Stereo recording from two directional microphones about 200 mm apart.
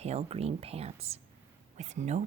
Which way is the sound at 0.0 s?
35° right (ahead or behind).